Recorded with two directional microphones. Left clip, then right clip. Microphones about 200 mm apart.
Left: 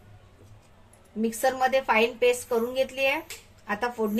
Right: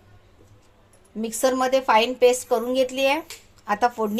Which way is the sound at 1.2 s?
40° right (ahead or behind).